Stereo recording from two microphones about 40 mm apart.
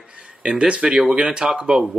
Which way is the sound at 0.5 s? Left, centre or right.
Right.